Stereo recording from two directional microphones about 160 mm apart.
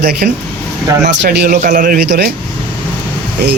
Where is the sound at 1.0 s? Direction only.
75° right (ahead or behind).